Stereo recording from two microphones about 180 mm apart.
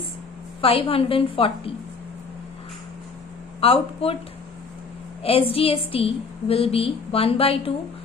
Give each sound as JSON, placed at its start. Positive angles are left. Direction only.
{"t": 0.6, "sound": "a woman's voice", "side_deg": 30}
{"t": 3.6, "sound": "a woman's voice", "side_deg": 30}
{"t": 5.2, "sound": "a woman's voice", "side_deg": 30}